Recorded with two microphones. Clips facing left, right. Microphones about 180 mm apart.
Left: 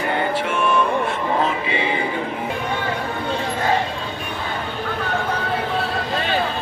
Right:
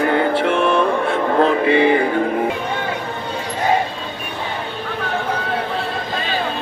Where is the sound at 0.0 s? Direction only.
60° right (ahead or behind).